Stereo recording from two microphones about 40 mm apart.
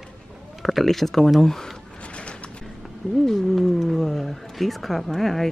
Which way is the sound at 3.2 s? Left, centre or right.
Centre.